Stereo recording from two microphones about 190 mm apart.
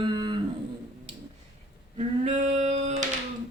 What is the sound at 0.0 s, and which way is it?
Cattle, 25° right (ahead or behind).